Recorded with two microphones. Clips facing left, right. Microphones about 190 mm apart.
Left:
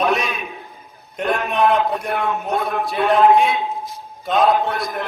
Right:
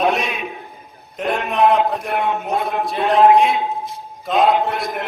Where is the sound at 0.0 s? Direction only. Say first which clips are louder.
Right 1 dB; centre (ahead or behind).